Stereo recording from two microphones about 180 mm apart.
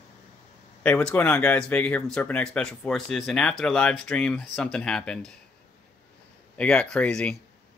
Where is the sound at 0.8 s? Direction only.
5° left (ahead or behind).